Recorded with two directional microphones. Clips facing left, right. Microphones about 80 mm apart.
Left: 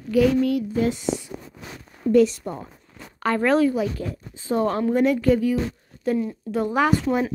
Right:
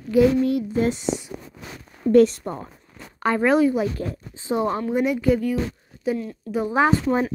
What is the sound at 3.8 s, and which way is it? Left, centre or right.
Speech, right.